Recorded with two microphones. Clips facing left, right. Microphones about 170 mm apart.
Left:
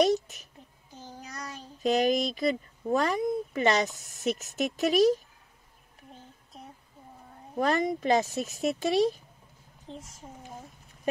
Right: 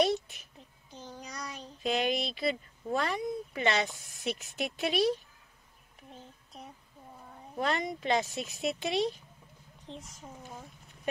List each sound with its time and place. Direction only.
0.0 s a sound: 40° left (ahead or behind)
1.8 s speech: 40° left (ahead or behind)
7.5 s speech: 45° left (ahead or behind)
9.9 s a child's voice: centre (ahead or behind)